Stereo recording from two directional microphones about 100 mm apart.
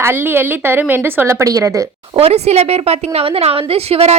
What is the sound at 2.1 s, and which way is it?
A woman's voice, 85° right.